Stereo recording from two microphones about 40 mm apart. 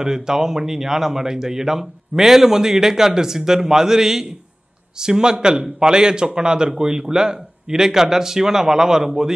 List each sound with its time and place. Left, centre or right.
0.0 s a man's voice: centre